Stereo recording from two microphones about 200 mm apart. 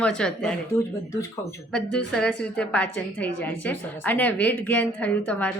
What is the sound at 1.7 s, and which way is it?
A woman's voice, 5° left (ahead or behind).